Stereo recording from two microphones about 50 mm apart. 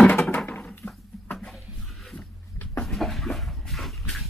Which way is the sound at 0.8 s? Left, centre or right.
Left.